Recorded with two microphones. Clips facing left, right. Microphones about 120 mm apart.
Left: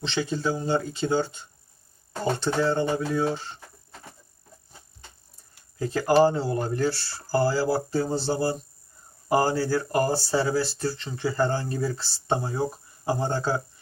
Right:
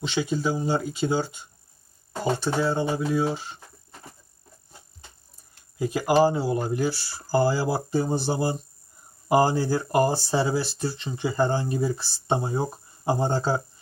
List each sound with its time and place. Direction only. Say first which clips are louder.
0.0 s speech: right 1 dB; 10° right (ahead or behind)
5.8 s speech: left 1 dB; 15° right (ahead or behind)